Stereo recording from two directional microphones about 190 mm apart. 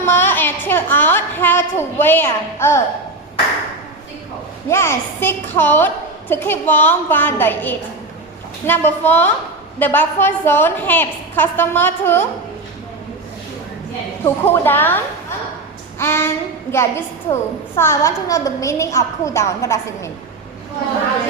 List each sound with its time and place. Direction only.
0.0 s a woman's voice: 10° left (ahead or behind)
4.7 s a woman's voice: 15° left (ahead or behind)
14.3 s a woman's voice: 10° left (ahead or behind)